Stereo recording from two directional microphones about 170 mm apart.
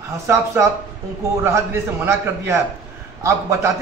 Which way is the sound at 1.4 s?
15° right (ahead or behind).